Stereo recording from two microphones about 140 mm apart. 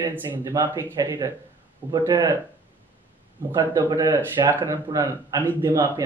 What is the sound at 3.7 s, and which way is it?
A man's voice, 25° right (ahead or behind).